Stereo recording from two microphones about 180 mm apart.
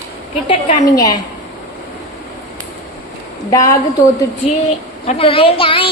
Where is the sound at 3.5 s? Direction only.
20° left (ahead or behind).